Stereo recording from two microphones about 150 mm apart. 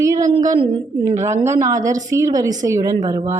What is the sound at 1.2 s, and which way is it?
A woman's voice, 20° right (ahead or behind).